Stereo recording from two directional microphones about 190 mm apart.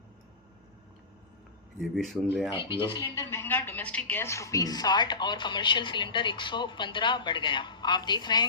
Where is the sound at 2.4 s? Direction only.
15° right (ahead or behind).